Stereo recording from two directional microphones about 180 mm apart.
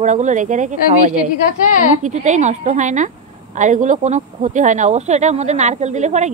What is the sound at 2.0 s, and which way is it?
Speech, 40° right (ahead or behind).